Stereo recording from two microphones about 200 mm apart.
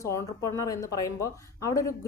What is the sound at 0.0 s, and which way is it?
Speech, 15° left (ahead or behind).